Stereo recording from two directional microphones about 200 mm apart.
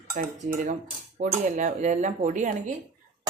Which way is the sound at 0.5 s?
40° right (ahead or behind).